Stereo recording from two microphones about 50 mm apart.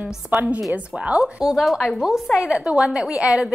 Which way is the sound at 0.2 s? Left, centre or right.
Right.